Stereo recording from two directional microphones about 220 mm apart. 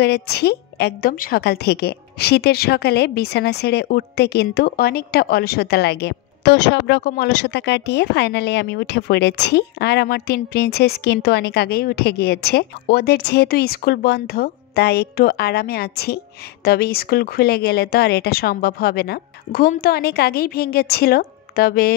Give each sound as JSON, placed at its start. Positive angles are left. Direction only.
{"t": 0.0, "sound": "a woman's voice", "side_deg": 45}